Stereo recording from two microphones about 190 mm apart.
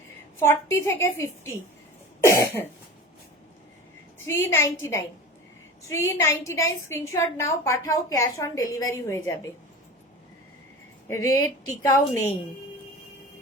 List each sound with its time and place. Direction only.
0.3 s a woman's voice: 15° left (ahead or behind)
2.2 s cough: 15° left (ahead or behind)
4.3 s a woman's voice: 15° left (ahead or behind)
11.1 s a woman's voice: 15° left (ahead or behind)